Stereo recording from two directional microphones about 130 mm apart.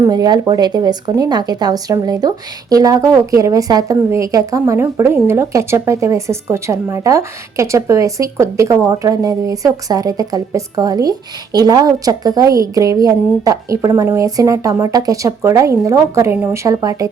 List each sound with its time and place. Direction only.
0.1 s a woman's voice: 35° right (ahead or behind)